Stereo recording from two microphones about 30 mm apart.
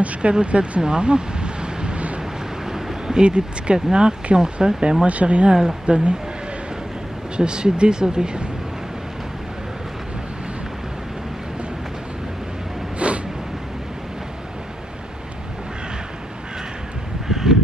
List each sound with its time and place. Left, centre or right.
0.0 s speech: right
2.6 s a sound: centre
3.2 s speech: right
5.0 s speech: right
7.3 s speech: right
13.0 s a sound: right
17.3 s crow: centre